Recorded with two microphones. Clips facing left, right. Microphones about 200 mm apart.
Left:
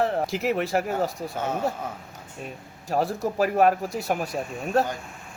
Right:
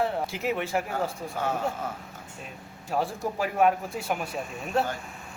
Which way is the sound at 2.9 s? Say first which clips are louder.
Left 4 dB; 40° left (ahead or behind).